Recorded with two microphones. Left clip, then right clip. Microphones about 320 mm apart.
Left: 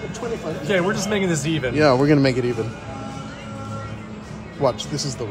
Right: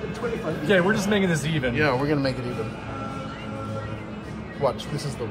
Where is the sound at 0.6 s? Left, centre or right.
Left.